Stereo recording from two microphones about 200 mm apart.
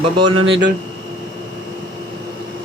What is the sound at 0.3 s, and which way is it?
Speech, 65° right (ahead or behind).